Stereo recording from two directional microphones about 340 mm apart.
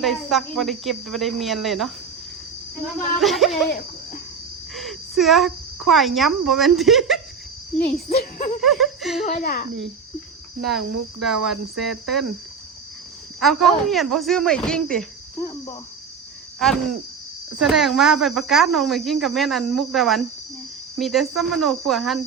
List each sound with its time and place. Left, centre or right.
0.0 s speech: centre
3.2 s speech: centre
3.7 s insect: left
4.7 s speech: centre
8.1 s speech: left
8.6 s laughter: centre
9.2 s speech: left
10.6 s speech: centre
13.4 s speech: centre